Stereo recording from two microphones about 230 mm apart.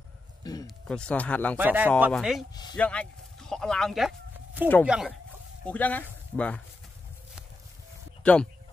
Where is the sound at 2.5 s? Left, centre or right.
Centre.